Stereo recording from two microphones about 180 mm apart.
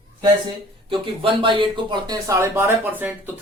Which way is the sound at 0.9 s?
30° right (ahead or behind).